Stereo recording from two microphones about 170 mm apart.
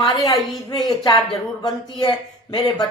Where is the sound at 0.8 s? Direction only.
25° left (ahead or behind).